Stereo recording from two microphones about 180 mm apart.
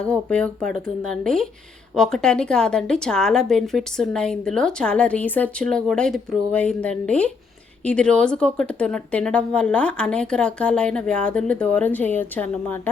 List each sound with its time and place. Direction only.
0.0 s a woman's voice: 5° left (ahead or behind)